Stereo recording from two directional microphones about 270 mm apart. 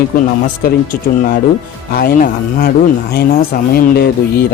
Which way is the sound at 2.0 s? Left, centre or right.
Left.